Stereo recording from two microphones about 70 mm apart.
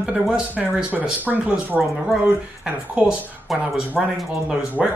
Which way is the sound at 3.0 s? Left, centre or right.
Centre.